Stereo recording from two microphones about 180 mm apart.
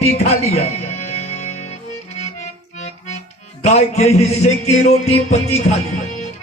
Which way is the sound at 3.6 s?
35° left (ahead or behind).